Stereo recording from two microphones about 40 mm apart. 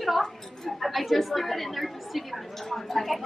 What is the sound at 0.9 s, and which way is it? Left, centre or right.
A woman's voice, centre.